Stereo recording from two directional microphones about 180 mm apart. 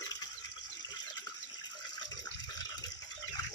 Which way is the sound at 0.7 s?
25° left (ahead or behind).